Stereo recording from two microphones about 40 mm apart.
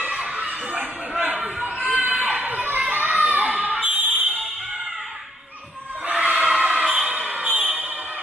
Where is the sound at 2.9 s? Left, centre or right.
Right.